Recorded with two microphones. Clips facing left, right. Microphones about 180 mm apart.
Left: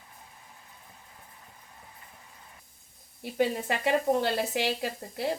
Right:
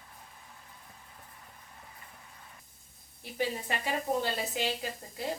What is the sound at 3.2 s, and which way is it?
Speech, 65° left (ahead or behind).